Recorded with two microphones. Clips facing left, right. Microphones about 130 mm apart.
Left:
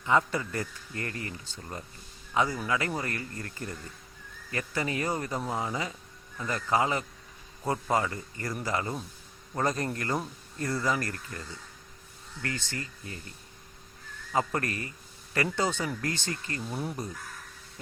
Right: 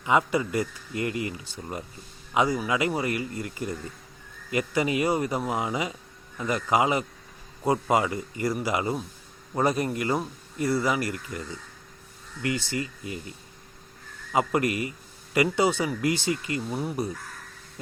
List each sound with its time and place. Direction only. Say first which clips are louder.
0.0 s speech: right 3 dB; 15° right (ahead or behind)
14.3 s a man's voice: right 5 dB; 15° right (ahead or behind)